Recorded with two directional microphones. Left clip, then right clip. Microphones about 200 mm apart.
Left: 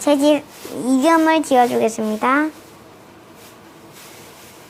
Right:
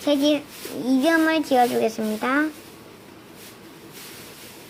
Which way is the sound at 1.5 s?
5° left (ahead or behind).